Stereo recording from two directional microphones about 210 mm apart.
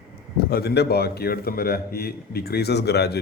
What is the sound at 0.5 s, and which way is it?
Speech, 50° left (ahead or behind).